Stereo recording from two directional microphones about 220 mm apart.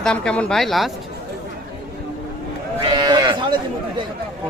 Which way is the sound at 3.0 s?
20° right (ahead or behind).